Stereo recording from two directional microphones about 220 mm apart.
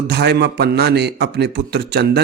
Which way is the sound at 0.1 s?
50° right (ahead or behind).